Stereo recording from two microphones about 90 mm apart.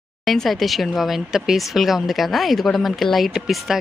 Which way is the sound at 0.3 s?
Centre (ahead or behind).